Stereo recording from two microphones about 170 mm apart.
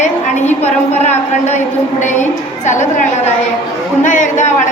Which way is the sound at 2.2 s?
45° left (ahead or behind).